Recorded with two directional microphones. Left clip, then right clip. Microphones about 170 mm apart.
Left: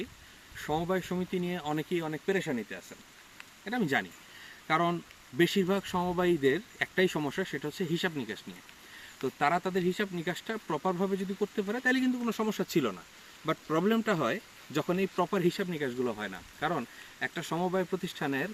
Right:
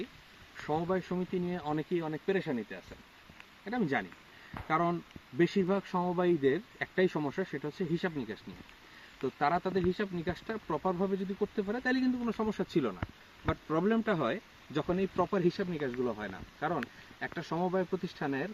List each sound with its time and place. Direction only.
0.6 s speech: 15° left (ahead or behind)